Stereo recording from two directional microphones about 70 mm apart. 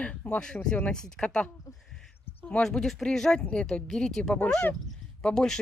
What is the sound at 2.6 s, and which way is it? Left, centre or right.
Speech, centre.